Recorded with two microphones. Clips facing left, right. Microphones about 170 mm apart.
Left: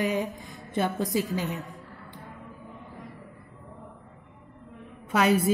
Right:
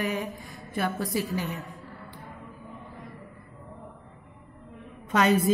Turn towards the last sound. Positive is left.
turn(degrees=10)  # may be behind; listen again after turning